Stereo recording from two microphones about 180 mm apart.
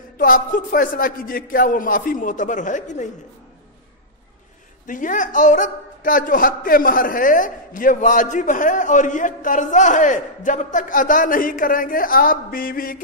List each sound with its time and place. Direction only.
0.2 s speech: 50° left (ahead or behind)
4.8 s speech: 45° left (ahead or behind)